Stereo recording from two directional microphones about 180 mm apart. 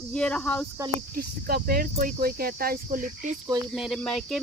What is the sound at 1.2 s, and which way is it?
Speech, 55° right (ahead or behind).